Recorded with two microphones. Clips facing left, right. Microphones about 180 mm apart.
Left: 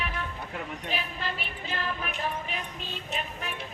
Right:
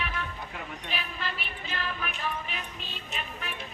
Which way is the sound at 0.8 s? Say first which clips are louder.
Left 2 dB; 40° left (ahead or behind).